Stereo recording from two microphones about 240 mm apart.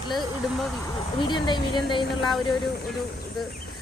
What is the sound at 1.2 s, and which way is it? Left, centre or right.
Speech, centre.